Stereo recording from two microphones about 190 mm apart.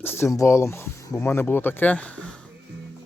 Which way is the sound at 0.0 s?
10° left (ahead or behind).